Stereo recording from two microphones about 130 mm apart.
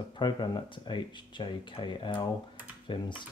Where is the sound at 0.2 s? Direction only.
40° left (ahead or behind).